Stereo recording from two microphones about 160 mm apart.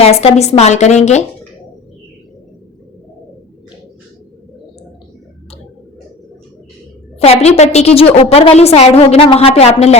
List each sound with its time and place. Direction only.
0.0 s speech: 40° left (ahead or behind)
7.2 s a woman's voice: 40° left (ahead or behind)